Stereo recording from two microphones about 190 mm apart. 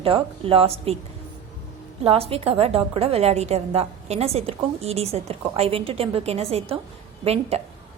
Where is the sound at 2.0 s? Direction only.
30° right (ahead or behind).